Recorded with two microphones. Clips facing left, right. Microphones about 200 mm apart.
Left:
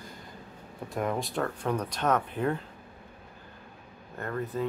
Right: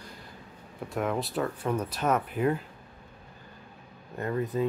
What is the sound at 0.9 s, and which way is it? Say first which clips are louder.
Speech: right 1 dB; centre (ahead or behind).